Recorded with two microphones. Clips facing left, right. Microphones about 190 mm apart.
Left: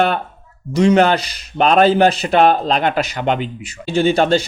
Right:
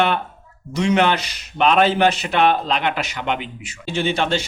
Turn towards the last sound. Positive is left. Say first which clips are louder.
# left 7 dB
turn(degrees=35)  # may be behind; listen again after turning